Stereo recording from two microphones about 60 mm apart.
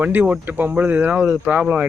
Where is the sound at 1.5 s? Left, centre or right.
Centre.